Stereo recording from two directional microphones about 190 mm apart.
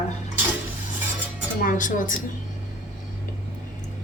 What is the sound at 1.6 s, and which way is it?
Speech, 45° left (ahead or behind).